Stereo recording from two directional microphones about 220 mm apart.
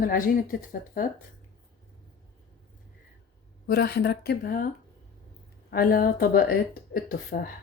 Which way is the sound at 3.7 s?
45° left (ahead or behind).